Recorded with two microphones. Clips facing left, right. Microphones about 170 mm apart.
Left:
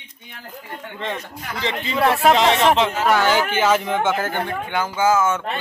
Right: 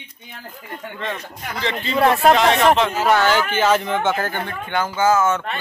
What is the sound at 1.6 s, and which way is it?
Speech, 15° left (ahead or behind).